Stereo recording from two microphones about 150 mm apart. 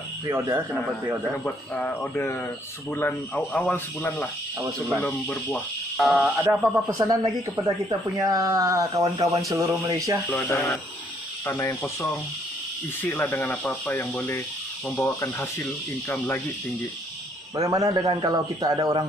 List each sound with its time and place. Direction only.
0.3 s a man's voice: 15° right (ahead or behind)
1.4 s speech: 10° left (ahead or behind)
4.6 s speech: 20° right (ahead or behind)
5.3 s speech: centre (ahead or behind); by 10.1 s 20° right (ahead or behind)
10.3 s speech: 15° left (ahead or behind)
17.6 s speech: 20° right (ahead or behind)